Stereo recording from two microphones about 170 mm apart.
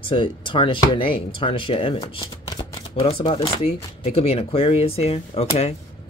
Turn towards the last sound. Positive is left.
turn(degrees=35)  # may be behind; listen again after turning